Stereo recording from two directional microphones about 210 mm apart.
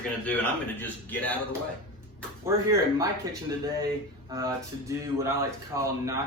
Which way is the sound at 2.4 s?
15° right (ahead or behind).